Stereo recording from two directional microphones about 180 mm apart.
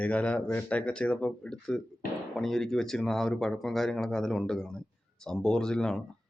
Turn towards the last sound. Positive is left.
turn(degrees=5)  # may be behind; listen again after turning